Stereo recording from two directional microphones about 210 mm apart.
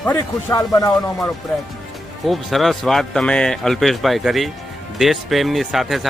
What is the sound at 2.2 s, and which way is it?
Speech, centre (ahead or behind).